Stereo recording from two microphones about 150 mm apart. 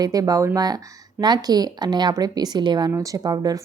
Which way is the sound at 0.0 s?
25° right (ahead or behind).